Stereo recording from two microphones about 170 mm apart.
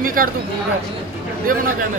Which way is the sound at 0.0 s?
55° right (ahead or behind).